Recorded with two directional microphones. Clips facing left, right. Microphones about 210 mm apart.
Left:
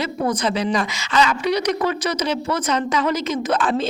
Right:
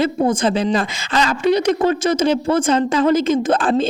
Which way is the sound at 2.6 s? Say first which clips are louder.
Right 4 dB; 30° right (ahead or behind).